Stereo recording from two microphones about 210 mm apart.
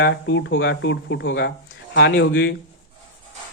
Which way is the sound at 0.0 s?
60° left (ahead or behind).